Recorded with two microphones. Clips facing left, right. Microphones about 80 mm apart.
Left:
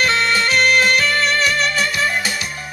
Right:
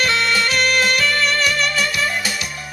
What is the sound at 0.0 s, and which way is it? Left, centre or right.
Music, left.